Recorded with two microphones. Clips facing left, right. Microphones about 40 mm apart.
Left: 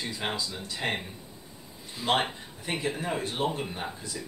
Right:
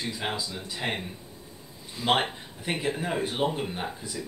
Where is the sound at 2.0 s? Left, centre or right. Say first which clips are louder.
Right 2 dB; centre.